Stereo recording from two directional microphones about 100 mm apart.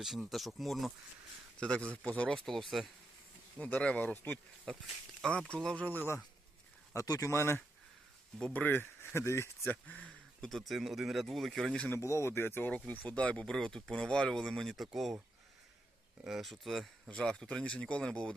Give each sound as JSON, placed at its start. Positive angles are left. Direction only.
{"t": 0.0, "sound": "speech", "side_deg": 0}
{"t": 1.5, "sound": "speech", "side_deg": 10}
{"t": 3.6, "sound": "speech", "side_deg": 10}
{"t": 6.9, "sound": "speech", "side_deg": 30}
{"t": 8.4, "sound": "speech", "side_deg": 10}
{"t": 9.8, "sound": "speech", "side_deg": 10}
{"t": 11.9, "sound": "speech", "side_deg": 30}
{"t": 16.2, "sound": "speech", "side_deg": 0}